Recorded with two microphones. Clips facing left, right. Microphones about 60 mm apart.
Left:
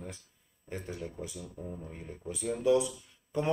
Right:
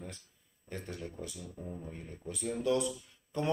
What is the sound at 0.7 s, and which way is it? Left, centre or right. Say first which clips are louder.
Speech: left 3 dB; centre.